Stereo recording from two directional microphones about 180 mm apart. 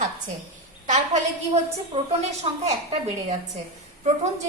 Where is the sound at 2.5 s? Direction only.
30° right (ahead or behind).